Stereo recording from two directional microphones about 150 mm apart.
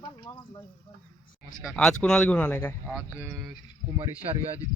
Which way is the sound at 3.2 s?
15° right (ahead or behind).